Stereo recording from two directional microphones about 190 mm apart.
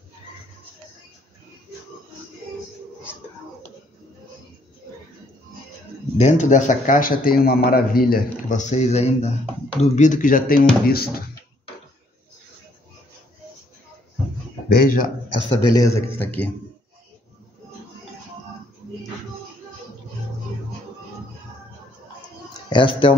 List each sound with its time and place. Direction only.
6.1 s a man's voice: 35° left (ahead or behind); by 11.2 s 55° left (ahead or behind)
14.7 s speech: 50° left (ahead or behind)
15.7 s speech: 15° left (ahead or behind)
22.7 s speech: 25° left (ahead or behind)